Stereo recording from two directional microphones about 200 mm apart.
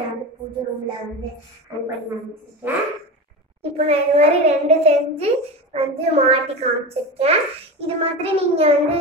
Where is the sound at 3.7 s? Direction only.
30° right (ahead or behind).